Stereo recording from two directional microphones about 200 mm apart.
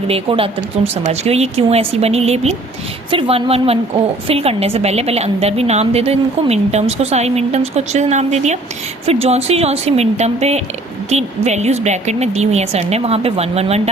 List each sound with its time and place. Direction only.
0.1 s a woman's voice: 25° right (ahead or behind)